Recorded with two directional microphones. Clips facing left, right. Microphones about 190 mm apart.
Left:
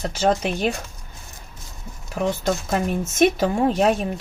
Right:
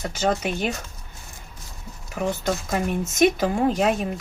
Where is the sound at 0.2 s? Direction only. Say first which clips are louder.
Left 3 dB; 30° left (ahead or behind).